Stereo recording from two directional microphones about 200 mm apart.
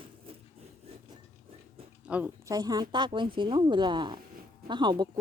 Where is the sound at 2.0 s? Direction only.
5° right (ahead or behind).